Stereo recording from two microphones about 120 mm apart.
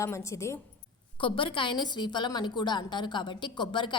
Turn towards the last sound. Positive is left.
turn(degrees=40)  # may be behind; listen again after turning